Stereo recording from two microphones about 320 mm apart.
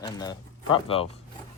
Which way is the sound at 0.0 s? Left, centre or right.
Centre.